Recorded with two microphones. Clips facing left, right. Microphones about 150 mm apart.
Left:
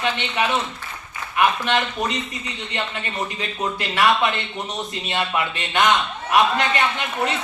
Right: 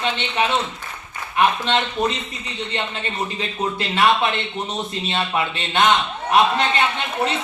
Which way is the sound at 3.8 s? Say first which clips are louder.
Right 1 dB; 25° right (ahead or behind).